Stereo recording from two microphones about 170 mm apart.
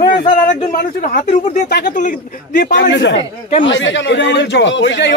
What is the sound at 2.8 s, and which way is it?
Speech, 90° left.